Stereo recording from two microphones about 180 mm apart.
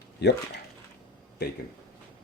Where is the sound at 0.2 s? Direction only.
70° left (ahead or behind).